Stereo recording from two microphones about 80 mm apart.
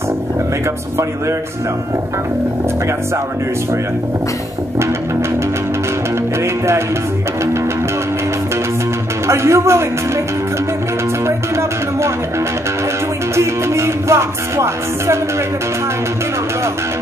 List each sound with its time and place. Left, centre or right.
9.3 s music: right
13.4 s music: right